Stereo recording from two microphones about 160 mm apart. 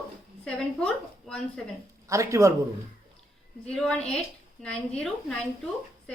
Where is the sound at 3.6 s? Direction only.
5° left (ahead or behind).